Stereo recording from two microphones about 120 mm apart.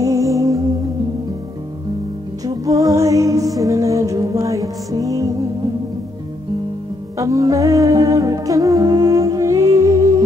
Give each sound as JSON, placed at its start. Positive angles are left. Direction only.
{"t": 0.0, "sound": "music", "side_deg": -30}
{"t": 2.4, "sound": "music", "side_deg": -30}
{"t": 7.2, "sound": "music", "side_deg": -25}